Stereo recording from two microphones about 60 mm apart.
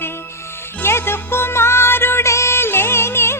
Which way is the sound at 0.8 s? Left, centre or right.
Left.